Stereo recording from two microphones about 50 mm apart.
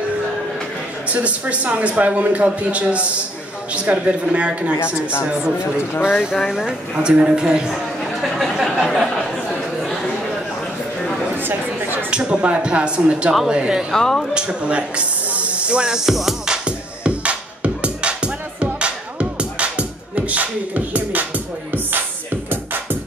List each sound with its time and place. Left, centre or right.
1.1 s speech: right
4.7 s speech: left
6.1 s speech: centre
7.0 s speech: centre
7.7 s chatter: centre
8.8 s a sound: centre
11.3 s chatter: right
12.1 s speech: centre
13.9 s speech: centre
14.3 s speech: right
16.1 s music: centre
16.6 s music: right